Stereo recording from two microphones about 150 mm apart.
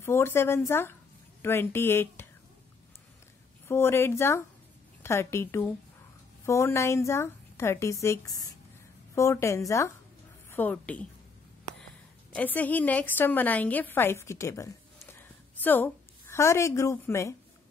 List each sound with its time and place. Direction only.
0.0 s speech: 15° left (ahead or behind)
3.6 s a woman's voice: 15° left (ahead or behind)
12.4 s a woman's voice: 10° left (ahead or behind)